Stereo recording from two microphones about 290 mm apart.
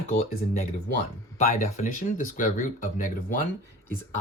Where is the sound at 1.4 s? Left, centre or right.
Left.